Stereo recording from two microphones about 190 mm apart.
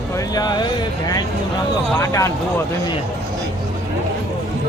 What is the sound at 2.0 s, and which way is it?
Speech, 15° left (ahead or behind).